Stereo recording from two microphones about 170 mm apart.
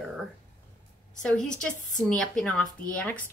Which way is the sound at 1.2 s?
5° left (ahead or behind).